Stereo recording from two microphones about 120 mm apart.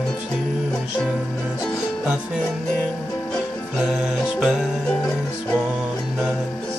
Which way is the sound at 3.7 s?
5° right (ahead or behind).